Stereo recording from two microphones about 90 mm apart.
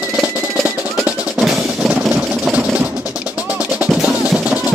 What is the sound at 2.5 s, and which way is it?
Sewing machine, 20° right (ahead or behind).